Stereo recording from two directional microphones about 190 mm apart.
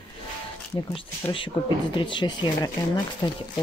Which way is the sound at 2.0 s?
25° left (ahead or behind).